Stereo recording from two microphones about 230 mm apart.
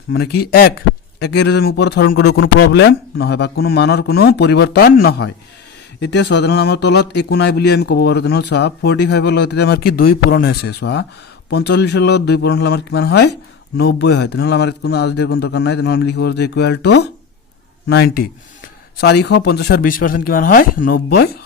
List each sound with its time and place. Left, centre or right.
0.1 s a man's voice: left